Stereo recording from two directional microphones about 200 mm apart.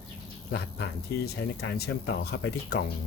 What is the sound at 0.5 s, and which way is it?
Speech, 55° left (ahead or behind).